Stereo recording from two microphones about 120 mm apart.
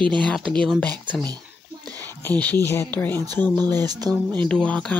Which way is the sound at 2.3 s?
15° left (ahead or behind).